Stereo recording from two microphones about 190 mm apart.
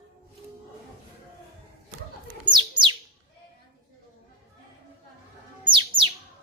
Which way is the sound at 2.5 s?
25° right (ahead or behind).